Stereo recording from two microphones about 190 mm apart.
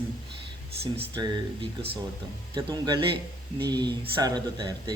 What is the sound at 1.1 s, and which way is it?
Speech, 25° right (ahead or behind).